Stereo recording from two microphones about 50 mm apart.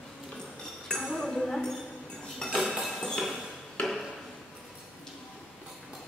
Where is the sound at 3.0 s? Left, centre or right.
Centre.